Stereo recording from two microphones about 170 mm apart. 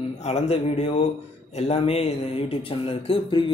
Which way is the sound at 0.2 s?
40° left (ahead or behind).